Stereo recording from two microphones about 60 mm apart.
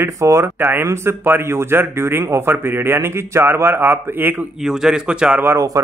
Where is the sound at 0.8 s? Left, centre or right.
Right.